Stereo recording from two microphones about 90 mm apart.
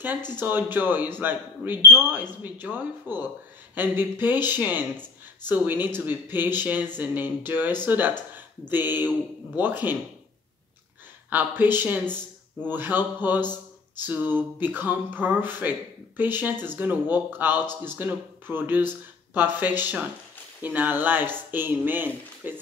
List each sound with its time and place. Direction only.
0.4 s speech: 25° right (ahead or behind)
11.2 s speech: 20° right (ahead or behind)